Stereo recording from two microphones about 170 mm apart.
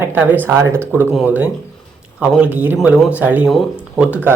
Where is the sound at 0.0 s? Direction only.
10° right (ahead or behind).